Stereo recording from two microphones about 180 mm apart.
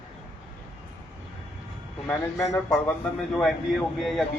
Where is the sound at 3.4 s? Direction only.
Centre (ahead or behind).